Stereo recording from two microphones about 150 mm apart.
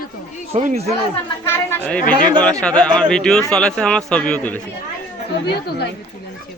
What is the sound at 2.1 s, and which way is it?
Speech, 30° right (ahead or behind).